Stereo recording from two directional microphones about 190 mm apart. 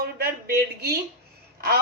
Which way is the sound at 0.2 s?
55° right (ahead or behind).